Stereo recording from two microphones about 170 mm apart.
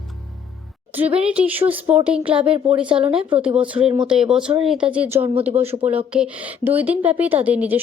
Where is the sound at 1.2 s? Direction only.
5° right (ahead or behind).